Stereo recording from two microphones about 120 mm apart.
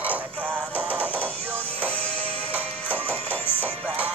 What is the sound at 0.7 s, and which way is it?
Music, 15° left (ahead or behind).